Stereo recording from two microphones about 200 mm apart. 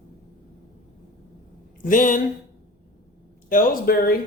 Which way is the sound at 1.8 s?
40° left (ahead or behind).